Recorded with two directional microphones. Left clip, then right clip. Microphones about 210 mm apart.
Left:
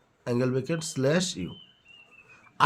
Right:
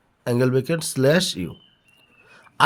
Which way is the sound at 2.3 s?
40° right (ahead or behind).